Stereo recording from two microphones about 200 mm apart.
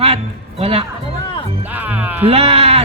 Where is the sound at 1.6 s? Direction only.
10° right (ahead or behind).